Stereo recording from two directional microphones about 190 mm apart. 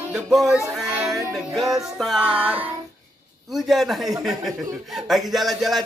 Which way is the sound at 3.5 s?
Centre (ahead or behind).